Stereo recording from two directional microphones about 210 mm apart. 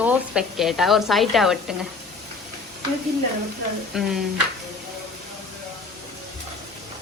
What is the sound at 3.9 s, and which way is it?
Speech, centre (ahead or behind).